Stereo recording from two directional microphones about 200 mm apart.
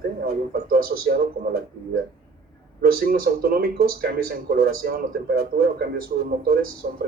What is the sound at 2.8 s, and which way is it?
Speech, 50° right (ahead or behind).